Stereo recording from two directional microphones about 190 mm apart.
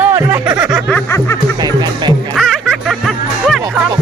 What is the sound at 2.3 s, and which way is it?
Music, centre (ahead or behind).